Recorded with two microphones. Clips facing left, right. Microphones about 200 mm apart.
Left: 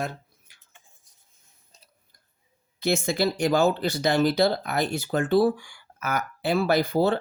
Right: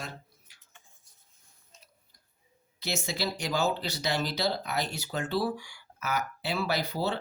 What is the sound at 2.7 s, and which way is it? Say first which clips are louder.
Speech: left 9 dB; 50° left (ahead or behind).